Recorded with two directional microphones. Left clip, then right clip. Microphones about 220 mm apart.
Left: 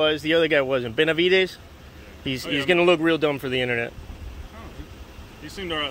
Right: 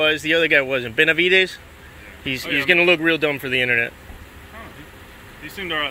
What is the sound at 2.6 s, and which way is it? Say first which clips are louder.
Speech: right 3 dB; 10° left (ahead or behind).